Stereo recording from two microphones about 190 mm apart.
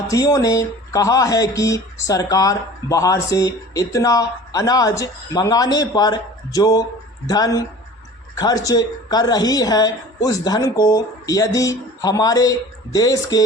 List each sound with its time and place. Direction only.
0.1 s a woman's voice: 15° left (ahead or behind)